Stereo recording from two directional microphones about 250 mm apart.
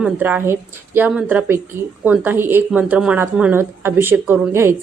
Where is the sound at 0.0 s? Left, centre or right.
Centre.